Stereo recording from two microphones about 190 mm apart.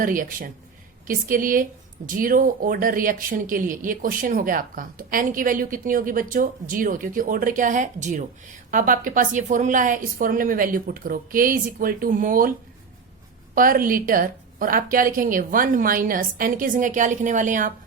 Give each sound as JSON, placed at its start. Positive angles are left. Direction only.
{"t": 0.0, "sound": "speech", "side_deg": -45}
{"t": 13.5, "sound": "speech", "side_deg": -45}